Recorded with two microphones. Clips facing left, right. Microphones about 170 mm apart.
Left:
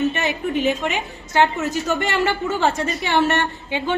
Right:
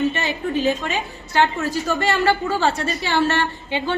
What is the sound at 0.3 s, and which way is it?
A woman's voice, 20° left (ahead or behind).